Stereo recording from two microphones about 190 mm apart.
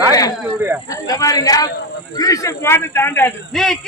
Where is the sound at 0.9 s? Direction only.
20° left (ahead or behind); by 3.8 s centre (ahead or behind).